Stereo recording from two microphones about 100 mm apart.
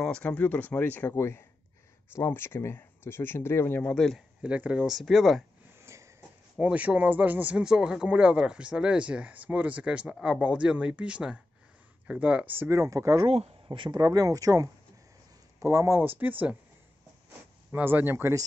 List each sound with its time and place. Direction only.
0.0 s speech: 10° left (ahead or behind)
3.9 s speech: 5° left (ahead or behind)
4.4 s speech: 10° right (ahead or behind)
5.9 s a sound: 25° right (ahead or behind)
6.6 s speech: 15° right (ahead or behind); by 13.3 s 35° right (ahead or behind)
13.7 s speech: 50° right (ahead or behind); by 16.0 s 30° right (ahead or behind)
16.2 s speech: 15° right (ahead or behind)
17.6 s speech: 20° right (ahead or behind)